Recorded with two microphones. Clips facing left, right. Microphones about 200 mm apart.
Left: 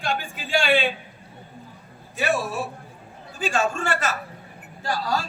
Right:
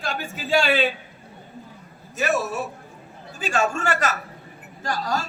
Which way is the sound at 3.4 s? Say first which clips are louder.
Right 1 dB; 45° right (ahead or behind).